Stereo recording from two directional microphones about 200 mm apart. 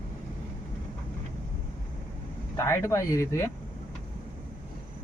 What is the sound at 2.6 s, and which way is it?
Speech, 15° left (ahead or behind).